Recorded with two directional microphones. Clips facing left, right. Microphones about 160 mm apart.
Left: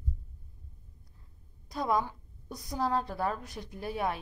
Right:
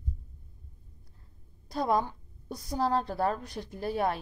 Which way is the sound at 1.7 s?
35° right (ahead or behind).